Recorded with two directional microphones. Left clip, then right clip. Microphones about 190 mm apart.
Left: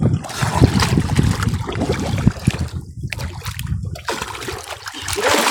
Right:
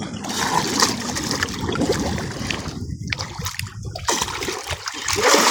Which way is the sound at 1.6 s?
15° left (ahead or behind).